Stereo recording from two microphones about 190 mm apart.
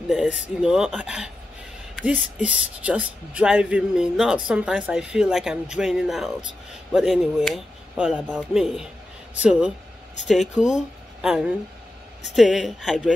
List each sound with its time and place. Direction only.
0.1 s speech: centre (ahead or behind)